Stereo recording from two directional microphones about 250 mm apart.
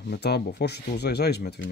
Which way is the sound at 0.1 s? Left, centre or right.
Left.